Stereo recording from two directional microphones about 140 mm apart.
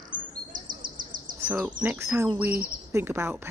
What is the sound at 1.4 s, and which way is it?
Speech, 10° right (ahead or behind).